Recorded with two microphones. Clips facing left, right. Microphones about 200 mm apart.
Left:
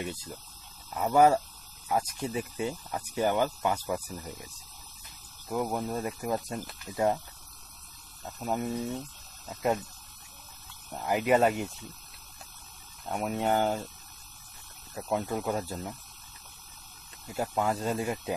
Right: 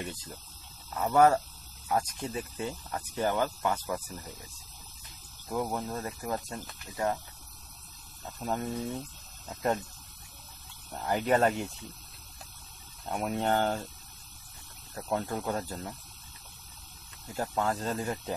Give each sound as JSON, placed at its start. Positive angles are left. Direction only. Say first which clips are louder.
{"t": 0.0, "sound": "speech", "louder": "left 3 dB", "side_deg": 10}
{"t": 5.5, "sound": "speech", "louder": "left 2 dB", "side_deg": 10}
{"t": 8.4, "sound": "speech", "louder": "left 2 dB", "side_deg": 10}
{"t": 10.9, "sound": "speech", "louder": "left 2 dB", "side_deg": 10}
{"t": 13.1, "sound": "speech", "louder": "left 1 dB", "side_deg": 5}
{"t": 15.0, "sound": "speech", "louder": "left 2 dB", "side_deg": 5}
{"t": 17.3, "sound": "speech", "louder": "left 1 dB", "side_deg": 10}